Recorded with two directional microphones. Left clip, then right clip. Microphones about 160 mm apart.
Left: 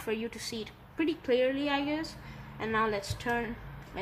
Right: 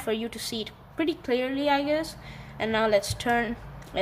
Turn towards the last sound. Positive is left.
turn(degrees=-40)  # may be behind; listen again after turning